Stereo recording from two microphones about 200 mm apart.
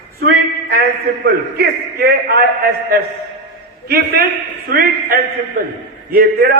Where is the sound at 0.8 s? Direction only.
50° right (ahead or behind).